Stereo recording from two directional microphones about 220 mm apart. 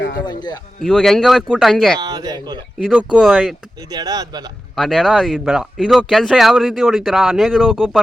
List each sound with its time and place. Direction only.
0.9 s speech: centre (ahead or behind)
2.0 s speech: 15° right (ahead or behind)
2.8 s speech: centre (ahead or behind)
3.9 s speech: 15° right (ahead or behind)
4.8 s speech: centre (ahead or behind)